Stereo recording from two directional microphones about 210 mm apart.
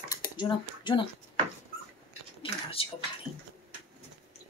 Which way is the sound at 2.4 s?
25° left (ahead or behind).